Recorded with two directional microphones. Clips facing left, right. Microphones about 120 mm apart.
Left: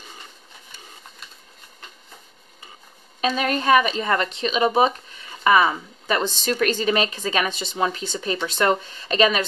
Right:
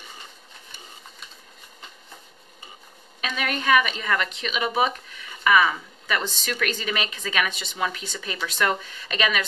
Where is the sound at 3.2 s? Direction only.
30° left (ahead or behind).